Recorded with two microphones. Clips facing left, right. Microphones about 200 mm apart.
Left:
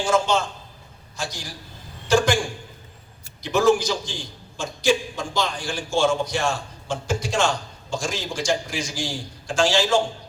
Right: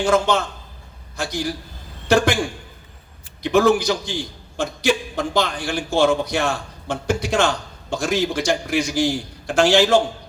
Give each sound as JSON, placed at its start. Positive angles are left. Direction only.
{"t": 0.0, "sound": "a man's voice", "side_deg": -60}
{"t": 3.4, "sound": "a man's voice", "side_deg": -60}